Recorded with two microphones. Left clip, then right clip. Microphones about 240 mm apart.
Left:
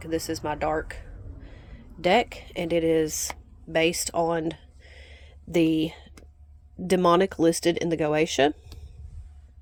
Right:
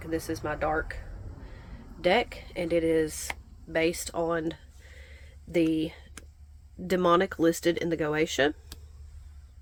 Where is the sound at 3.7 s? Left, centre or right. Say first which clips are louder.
Left 4 dB; left.